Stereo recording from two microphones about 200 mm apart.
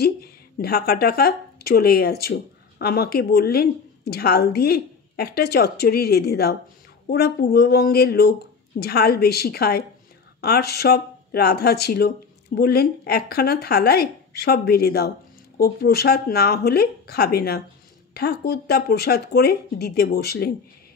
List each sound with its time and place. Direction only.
0.0 s a woman's voice: 50° left (ahead or behind)